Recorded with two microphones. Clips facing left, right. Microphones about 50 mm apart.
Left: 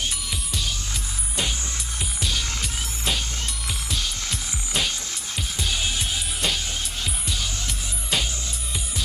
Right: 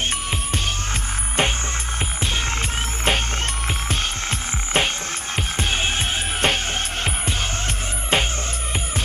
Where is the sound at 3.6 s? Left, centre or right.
Right.